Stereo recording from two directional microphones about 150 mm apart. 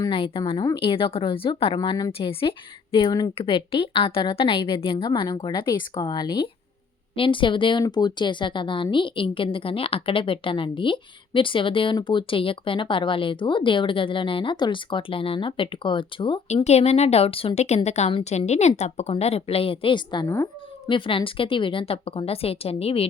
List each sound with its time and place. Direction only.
0.1 s speech: 35° left (ahead or behind)
16.6 s speech: 45° left (ahead or behind)
20.2 s cat: 20° left (ahead or behind)
20.9 s speech: 35° left (ahead or behind)